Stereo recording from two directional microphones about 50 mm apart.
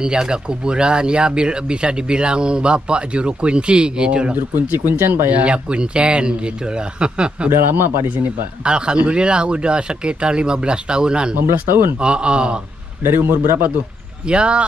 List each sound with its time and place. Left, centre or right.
0.0 s speech: centre
4.4 s speech: right
5.3 s speech: right
7.4 s speech: right
8.1 s speech: right
8.6 s speech: centre
11.3 s speech: right
12.0 s speech: centre
13.0 s speech: right
14.2 s speech: right